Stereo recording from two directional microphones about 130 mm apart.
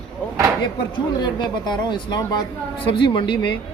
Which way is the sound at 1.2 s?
35° left (ahead or behind).